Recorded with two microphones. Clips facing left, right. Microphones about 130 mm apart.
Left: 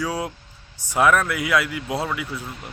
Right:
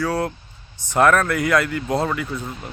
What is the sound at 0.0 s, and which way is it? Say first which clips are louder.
Speech: right 4 dB; 10° left (ahead or behind).